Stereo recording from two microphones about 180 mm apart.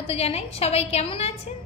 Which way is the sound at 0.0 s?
35° left (ahead or behind).